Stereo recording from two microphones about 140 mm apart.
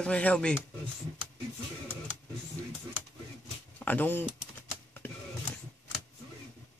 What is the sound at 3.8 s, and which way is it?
Speech, 10° left (ahead or behind).